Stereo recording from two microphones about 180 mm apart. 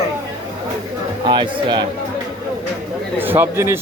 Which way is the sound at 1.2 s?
25° right (ahead or behind).